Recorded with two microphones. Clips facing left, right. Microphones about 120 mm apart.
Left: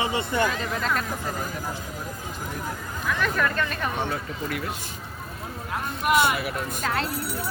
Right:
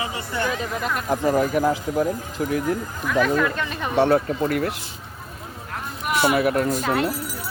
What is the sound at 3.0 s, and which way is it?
Speech, 5° right (ahead or behind).